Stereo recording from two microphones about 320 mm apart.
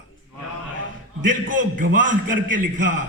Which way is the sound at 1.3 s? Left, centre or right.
Right.